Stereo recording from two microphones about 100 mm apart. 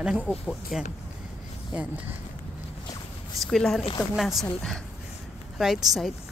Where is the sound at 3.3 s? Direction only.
5° left (ahead or behind).